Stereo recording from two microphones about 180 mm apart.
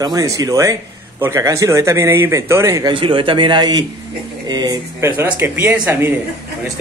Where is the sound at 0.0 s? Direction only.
20° right (ahead or behind).